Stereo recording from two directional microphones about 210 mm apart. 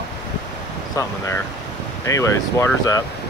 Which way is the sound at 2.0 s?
15° left (ahead or behind).